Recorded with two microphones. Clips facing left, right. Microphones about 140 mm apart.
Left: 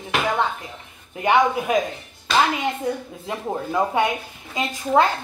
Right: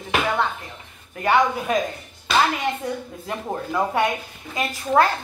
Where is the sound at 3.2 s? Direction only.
15° left (ahead or behind).